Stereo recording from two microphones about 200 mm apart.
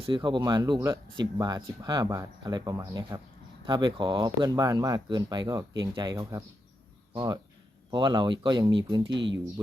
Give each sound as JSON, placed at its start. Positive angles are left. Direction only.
{"t": 0.0, "sound": "speech", "side_deg": -25}
{"t": 9.0, "sound": "speech", "side_deg": -65}